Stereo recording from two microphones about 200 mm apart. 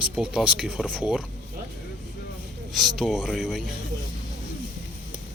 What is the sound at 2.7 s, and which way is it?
Speech, centre (ahead or behind).